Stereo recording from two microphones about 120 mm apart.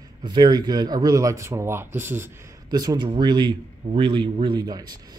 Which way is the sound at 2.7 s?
35° right (ahead or behind).